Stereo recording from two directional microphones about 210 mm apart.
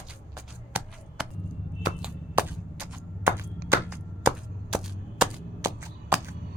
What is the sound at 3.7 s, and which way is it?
Chop, 5° right (ahead or behind).